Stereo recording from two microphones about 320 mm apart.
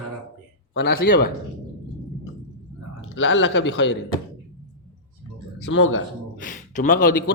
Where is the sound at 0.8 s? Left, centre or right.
Left.